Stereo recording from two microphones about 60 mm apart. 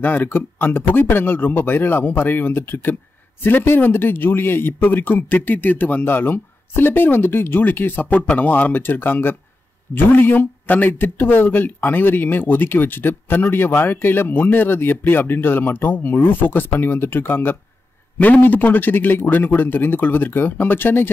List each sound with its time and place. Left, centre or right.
0.0 s speech: left